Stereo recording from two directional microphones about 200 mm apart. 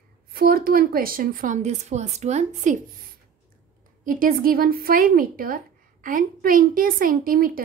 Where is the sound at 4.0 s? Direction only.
45° right (ahead or behind).